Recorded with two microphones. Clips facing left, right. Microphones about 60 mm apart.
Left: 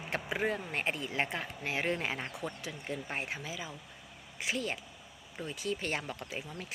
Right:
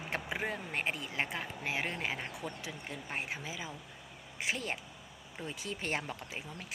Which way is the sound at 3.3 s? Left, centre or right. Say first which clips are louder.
Left 1 dB; centre.